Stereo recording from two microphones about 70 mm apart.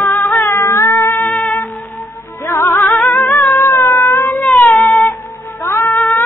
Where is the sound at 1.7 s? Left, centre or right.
Left.